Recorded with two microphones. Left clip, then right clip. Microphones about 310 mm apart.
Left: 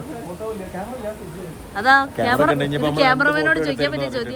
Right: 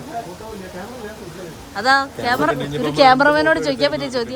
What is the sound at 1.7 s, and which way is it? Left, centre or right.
A woman's voice, centre.